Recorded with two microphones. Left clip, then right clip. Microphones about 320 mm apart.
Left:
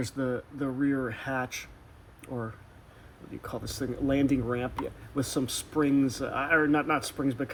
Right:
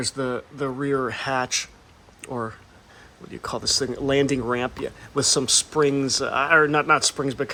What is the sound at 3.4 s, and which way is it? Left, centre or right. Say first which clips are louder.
Speech: right 12 dB; centre.